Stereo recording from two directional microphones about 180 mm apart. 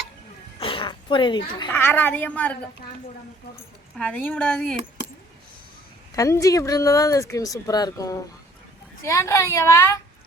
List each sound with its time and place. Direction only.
0.6 s a sound: 30° left (ahead or behind)
1.7 s a woman's voice: 10° left (ahead or behind)
3.9 s speech: 5° left (ahead or behind)
6.1 s a woman's voice: 15° left (ahead or behind)